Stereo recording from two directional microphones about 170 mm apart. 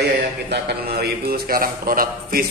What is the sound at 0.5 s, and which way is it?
A man's voice, 70° right (ahead or behind).